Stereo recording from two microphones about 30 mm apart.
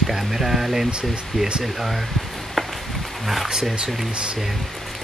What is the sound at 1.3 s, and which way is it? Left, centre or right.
Speech, right.